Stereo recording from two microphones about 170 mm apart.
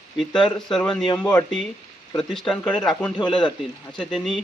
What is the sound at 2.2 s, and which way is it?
Speech, centre (ahead or behind).